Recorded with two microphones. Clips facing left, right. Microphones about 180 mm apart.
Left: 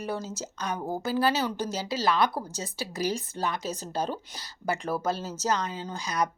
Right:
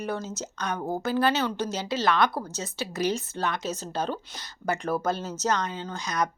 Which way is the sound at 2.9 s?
30° left (ahead or behind).